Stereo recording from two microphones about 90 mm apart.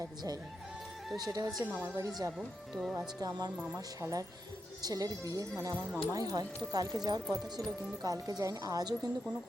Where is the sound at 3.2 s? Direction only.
45° right (ahead or behind).